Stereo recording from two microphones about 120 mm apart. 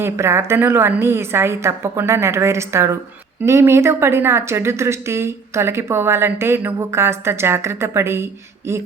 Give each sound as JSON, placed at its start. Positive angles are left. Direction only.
{"t": 0.0, "sound": "a woman's voice", "side_deg": -20}